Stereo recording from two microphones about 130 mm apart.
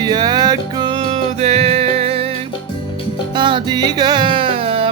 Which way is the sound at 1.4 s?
55° right (ahead or behind).